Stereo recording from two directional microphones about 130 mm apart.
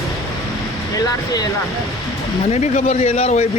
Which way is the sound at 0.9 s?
30° left (ahead or behind).